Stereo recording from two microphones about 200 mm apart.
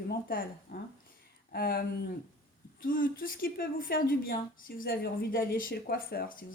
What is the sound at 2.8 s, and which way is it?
Speech, 45° left (ahead or behind).